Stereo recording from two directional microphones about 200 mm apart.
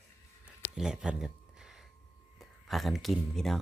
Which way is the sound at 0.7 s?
5° right (ahead or behind).